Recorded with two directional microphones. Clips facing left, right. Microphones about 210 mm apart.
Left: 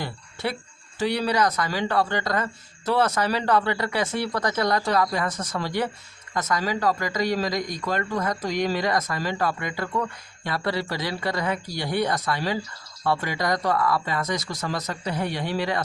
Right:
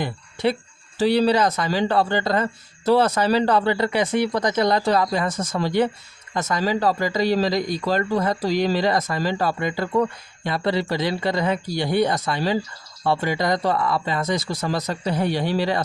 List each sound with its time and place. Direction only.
0.9 s speech: 30° right (ahead or behind)